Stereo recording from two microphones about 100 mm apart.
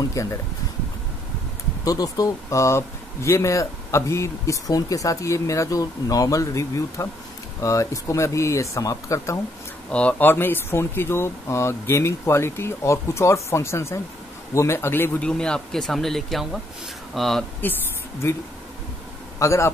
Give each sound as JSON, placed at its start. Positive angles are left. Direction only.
{"t": 0.0, "sound": "speech", "side_deg": 30}
{"t": 1.9, "sound": "speech", "side_deg": 35}
{"t": 9.8, "sound": "speech", "side_deg": 10}
{"t": 15.2, "sound": "speech", "side_deg": 10}
{"t": 19.4, "sound": "speech", "side_deg": 30}